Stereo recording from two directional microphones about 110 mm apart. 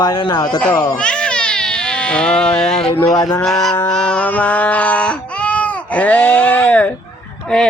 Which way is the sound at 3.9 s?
10° left (ahead or behind).